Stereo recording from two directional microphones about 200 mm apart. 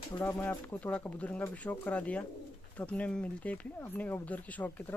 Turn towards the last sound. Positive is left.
turn(degrees=10)  # may be behind; listen again after turning